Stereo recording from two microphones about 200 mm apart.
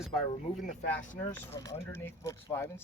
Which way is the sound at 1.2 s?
10° left (ahead or behind).